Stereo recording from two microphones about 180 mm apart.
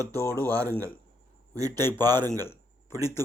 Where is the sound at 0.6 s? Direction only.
10° left (ahead or behind).